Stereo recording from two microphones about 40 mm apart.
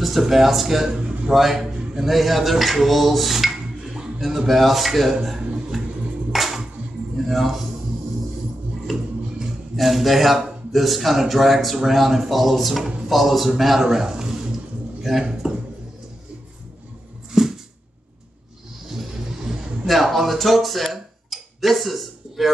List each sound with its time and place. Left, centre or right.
0.0 s a man's voice: centre
5.2 s a sound: centre
6.3 s music: centre
7.2 s a man's voice: centre
9.8 s a man's voice: centre
17.3 s a sound: centre
19.9 s speech: centre